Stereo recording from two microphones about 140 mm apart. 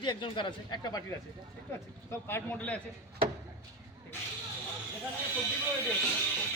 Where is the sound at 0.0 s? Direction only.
35° left (ahead or behind); by 2.8 s 10° left (ahead or behind).